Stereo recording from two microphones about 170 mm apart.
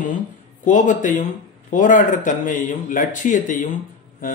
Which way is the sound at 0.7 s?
50° left (ahead or behind).